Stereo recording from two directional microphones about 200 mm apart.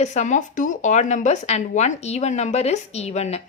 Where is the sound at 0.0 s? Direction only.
35° left (ahead or behind).